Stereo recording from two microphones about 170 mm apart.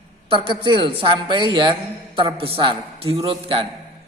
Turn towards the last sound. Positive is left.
turn(degrees=-30)  # may be behind; listen again after turning